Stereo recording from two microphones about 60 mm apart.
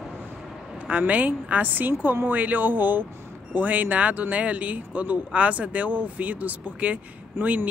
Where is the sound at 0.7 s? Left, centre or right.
Right.